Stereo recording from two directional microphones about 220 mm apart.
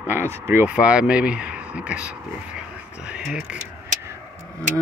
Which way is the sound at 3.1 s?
5° right (ahead or behind).